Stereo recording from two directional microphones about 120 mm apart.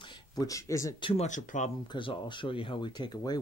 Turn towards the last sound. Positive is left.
turn(degrees=35)  # may be behind; listen again after turning